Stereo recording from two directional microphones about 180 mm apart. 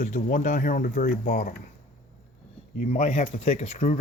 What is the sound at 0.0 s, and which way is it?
Speech, 45° left (ahead or behind).